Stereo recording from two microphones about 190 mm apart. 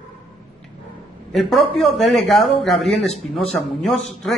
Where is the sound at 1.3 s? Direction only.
Centre (ahead or behind).